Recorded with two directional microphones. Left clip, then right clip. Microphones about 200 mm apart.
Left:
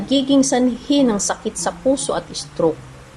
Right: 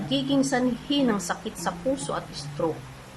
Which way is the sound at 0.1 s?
20° left (ahead or behind).